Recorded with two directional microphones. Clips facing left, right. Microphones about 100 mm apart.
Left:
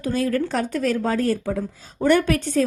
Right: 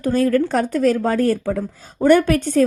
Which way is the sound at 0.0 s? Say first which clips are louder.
Right 5 dB; 50° right (ahead or behind).